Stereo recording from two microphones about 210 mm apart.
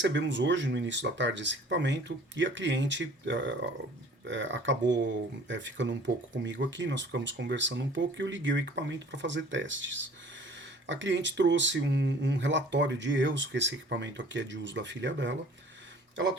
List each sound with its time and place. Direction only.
0.0 s speech: 60° right (ahead or behind)